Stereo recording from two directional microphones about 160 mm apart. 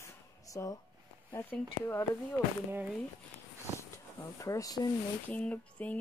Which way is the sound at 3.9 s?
20° left (ahead or behind).